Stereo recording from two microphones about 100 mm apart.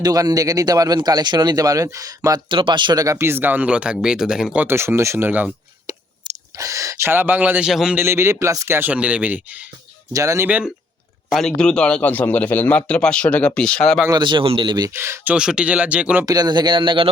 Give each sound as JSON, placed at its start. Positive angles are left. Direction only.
{"t": 0.0, "sound": "speech", "side_deg": -40}
{"t": 2.5, "sound": "speech", "side_deg": -55}
{"t": 4.6, "sound": "speech", "side_deg": -25}
{"t": 6.3, "sound": "a sound", "side_deg": -50}
{"t": 6.6, "sound": "speech", "side_deg": -35}
{"t": 7.7, "sound": "a man's voice", "side_deg": -5}
{"t": 7.9, "sound": "speech", "side_deg": -25}
{"t": 10.1, "sound": "speech", "side_deg": -35}
{"t": 10.4, "sound": "speech", "side_deg": -15}
{"t": 11.3, "sound": "a man's voice", "side_deg": 5}
{"t": 14.2, "sound": "speech", "side_deg": -55}
{"t": 14.9, "sound": "speech", "side_deg": -25}
{"t": 15.4, "sound": "speech", "side_deg": -10}
{"t": 16.2, "sound": "speech", "side_deg": -40}